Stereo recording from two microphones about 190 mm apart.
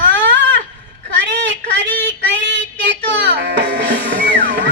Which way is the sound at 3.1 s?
70° right (ahead or behind).